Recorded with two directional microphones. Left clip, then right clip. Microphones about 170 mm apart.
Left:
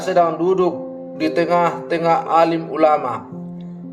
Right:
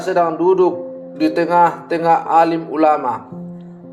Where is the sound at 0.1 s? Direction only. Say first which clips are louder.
Right 1 dB; 25° right (ahead or behind).